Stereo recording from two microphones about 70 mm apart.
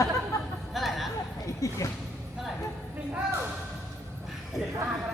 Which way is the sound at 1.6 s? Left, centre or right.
Left.